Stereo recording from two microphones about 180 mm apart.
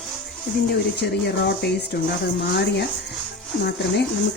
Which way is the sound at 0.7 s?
65° left (ahead or behind).